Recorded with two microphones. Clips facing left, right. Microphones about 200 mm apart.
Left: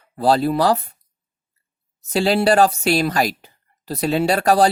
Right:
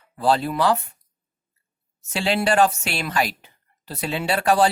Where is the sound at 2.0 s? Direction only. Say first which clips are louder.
Left 5 dB; 35° left (ahead or behind).